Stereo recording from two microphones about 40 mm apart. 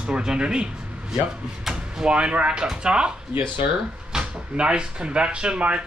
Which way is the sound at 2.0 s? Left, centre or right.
Right.